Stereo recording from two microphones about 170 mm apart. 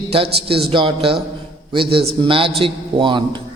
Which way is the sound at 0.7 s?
30° right (ahead or behind).